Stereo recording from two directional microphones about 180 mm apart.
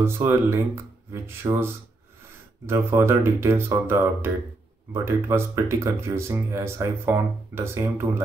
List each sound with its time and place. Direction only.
0.0 s speech: 15° right (ahead or behind)